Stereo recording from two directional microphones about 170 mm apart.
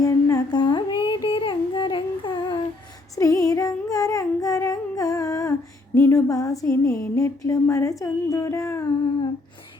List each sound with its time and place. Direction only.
0.0 s music: 20° left (ahead or behind)
3.2 s humming: 20° left (ahead or behind)
6.8 s music: 20° left (ahead or behind)